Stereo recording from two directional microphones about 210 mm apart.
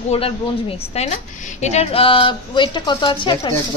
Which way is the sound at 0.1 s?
25° left (ahead or behind).